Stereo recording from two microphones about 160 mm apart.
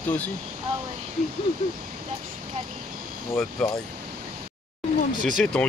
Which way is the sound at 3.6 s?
5° left (ahead or behind).